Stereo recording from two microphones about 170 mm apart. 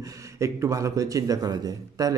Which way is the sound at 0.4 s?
20° right (ahead or behind).